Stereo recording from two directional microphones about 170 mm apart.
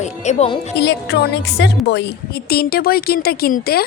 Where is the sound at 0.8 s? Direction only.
85° left.